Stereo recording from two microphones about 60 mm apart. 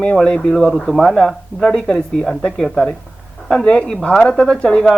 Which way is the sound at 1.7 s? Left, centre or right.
Centre.